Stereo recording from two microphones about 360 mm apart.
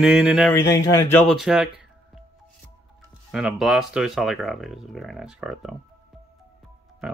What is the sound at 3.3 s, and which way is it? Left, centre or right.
Speech, centre.